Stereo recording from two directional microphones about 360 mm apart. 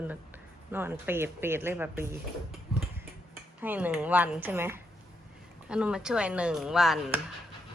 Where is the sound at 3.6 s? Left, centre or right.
Centre.